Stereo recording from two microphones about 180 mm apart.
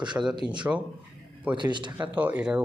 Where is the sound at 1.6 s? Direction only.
25° right (ahead or behind).